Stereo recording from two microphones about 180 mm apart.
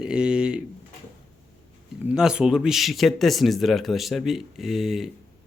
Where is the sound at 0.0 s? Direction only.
5° right (ahead or behind).